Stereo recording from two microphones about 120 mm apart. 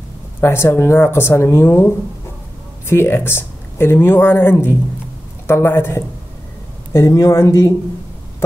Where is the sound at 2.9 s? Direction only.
20° left (ahead or behind).